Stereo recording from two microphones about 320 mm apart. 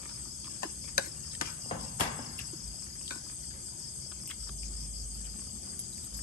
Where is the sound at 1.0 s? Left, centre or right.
Left.